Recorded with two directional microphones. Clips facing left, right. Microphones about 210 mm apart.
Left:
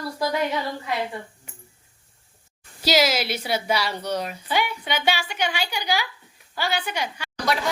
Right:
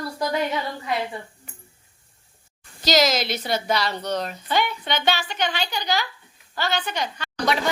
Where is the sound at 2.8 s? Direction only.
10° left (ahead or behind).